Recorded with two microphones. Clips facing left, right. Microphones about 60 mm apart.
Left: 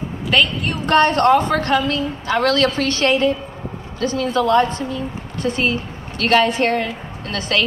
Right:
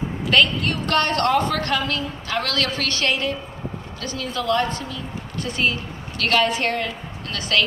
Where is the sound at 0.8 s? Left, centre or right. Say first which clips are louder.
Left 7 dB; left.